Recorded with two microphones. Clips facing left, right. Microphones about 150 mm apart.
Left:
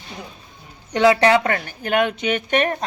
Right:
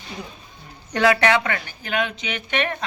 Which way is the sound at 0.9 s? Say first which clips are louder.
Left 3 dB; 25° left (ahead or behind).